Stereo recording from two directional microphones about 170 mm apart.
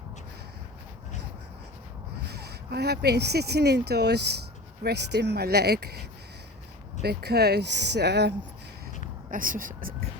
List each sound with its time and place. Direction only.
2.3 s speech: 70° right (ahead or behind)
9.3 s speech: 55° right (ahead or behind)